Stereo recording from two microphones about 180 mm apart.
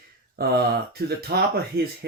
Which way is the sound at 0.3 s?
60° right (ahead or behind).